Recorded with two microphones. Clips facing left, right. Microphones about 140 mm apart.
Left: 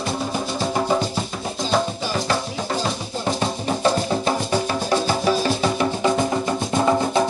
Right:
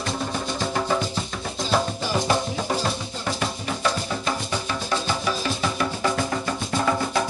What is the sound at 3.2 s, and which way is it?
Music, 30° left (ahead or behind).